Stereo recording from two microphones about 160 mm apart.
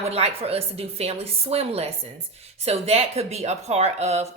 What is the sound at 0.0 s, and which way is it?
A woman's voice, 40° right (ahead or behind).